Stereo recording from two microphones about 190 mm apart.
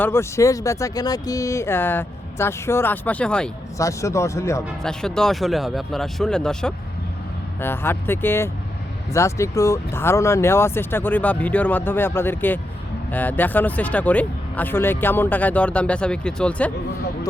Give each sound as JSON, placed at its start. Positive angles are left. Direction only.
{"t": 0.0, "sound": "speech", "side_deg": 15}
{"t": 3.8, "sound": "speech", "side_deg": 15}
{"t": 4.8, "sound": "speech", "side_deg": 5}